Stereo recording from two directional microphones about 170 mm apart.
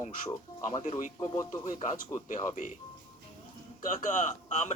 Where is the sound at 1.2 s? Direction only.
20° left (ahead or behind).